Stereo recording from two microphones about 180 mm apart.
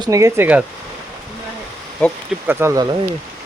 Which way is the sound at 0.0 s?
15° right (ahead or behind).